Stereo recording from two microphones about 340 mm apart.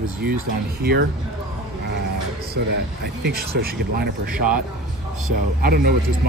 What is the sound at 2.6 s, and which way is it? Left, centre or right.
A man's voice, right.